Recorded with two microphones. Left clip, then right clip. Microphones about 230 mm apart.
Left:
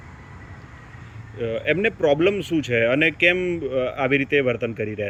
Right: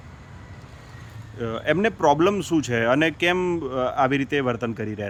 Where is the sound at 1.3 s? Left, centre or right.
Centre.